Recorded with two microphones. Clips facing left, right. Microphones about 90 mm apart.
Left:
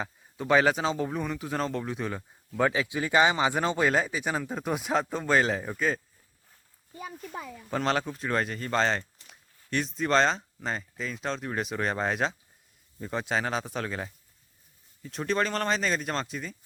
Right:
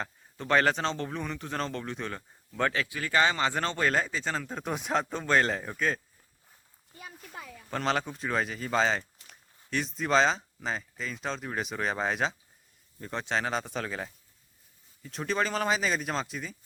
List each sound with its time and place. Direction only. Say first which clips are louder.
0.0 s a man's voice: left 3 dB; 5° left (ahead or behind)
7.7 s a man's voice: left 2 dB; centre (ahead or behind)